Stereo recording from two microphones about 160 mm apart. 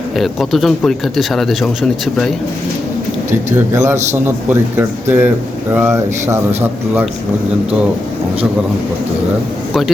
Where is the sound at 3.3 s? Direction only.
15° right (ahead or behind).